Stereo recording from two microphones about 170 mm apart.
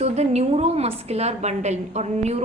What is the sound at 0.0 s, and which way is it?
A woman's voice, 40° right (ahead or behind).